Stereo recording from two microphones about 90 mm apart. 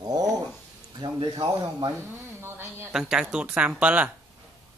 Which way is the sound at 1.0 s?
60° right (ahead or behind).